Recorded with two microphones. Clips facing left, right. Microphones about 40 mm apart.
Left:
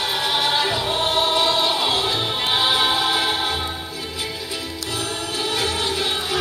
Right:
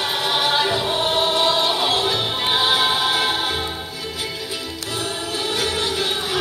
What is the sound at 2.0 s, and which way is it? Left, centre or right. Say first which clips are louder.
Music: right 1 dB; centre.